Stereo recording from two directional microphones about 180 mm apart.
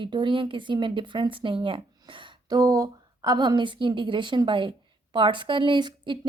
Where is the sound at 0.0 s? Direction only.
25° right (ahead or behind).